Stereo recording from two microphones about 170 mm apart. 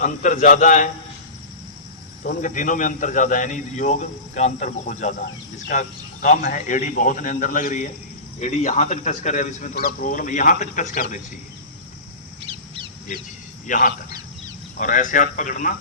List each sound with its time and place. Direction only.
0.0 s a man's voice: 50° left (ahead or behind)
2.2 s a man's voice: 50° left (ahead or behind)
13.1 s a man's voice: 45° left (ahead or behind)